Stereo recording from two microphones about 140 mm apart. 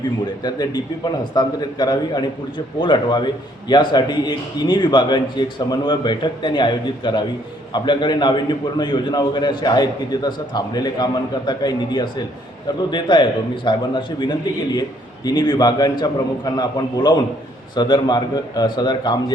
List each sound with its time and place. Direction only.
0.4 s a man's voice: 30° left (ahead or behind)